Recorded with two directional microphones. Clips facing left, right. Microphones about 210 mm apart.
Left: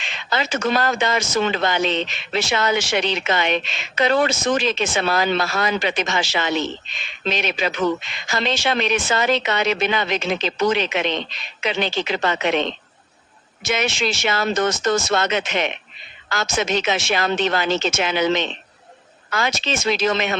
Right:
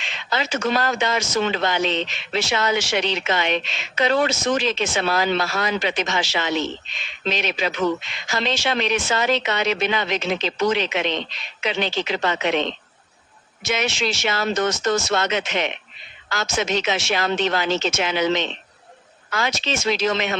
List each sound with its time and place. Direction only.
0.0 s speech: 55° left (ahead or behind)